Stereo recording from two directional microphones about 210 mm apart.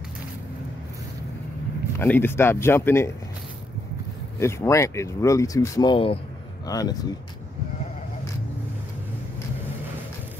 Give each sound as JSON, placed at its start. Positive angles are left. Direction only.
{"t": 2.0, "sound": "speech", "side_deg": 10}
{"t": 4.4, "sound": "speech", "side_deg": 15}